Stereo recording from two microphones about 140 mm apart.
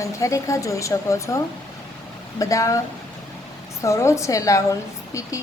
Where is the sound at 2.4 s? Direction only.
25° left (ahead or behind).